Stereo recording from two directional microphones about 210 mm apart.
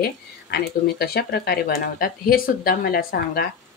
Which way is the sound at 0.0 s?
50° left (ahead or behind).